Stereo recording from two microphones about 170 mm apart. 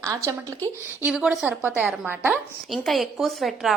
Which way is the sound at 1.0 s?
5° right (ahead or behind).